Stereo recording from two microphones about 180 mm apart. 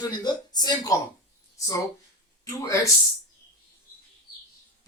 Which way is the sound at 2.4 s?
20° left (ahead or behind).